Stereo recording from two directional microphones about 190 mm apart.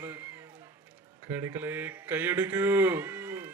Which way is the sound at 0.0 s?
10° right (ahead or behind).